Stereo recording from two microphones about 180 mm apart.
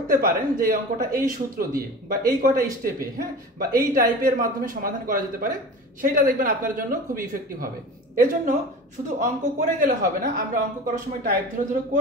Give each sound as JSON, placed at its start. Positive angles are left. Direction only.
{"t": 0.1, "sound": "speech", "side_deg": -50}
{"t": 9.0, "sound": "speech", "side_deg": -45}